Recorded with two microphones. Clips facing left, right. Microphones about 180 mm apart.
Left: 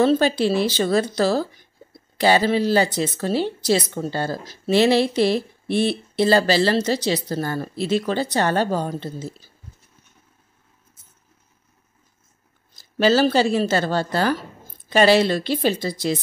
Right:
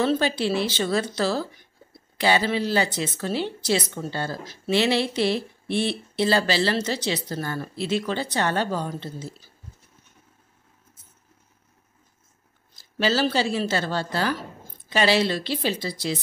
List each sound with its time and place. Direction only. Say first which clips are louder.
0.0 s speech: left 5 dB; 40° left (ahead or behind)
13.0 s speech: left 6 dB; 45° left (ahead or behind)